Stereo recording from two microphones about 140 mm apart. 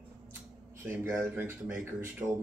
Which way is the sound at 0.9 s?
15° right (ahead or behind).